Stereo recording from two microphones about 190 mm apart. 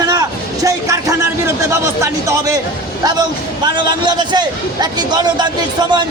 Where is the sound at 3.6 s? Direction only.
25° right (ahead or behind).